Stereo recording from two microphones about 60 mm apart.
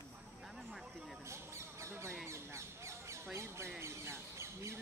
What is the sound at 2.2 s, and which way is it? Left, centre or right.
Bird, right.